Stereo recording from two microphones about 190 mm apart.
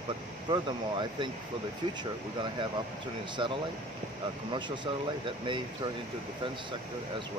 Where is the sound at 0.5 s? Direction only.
25° right (ahead or behind).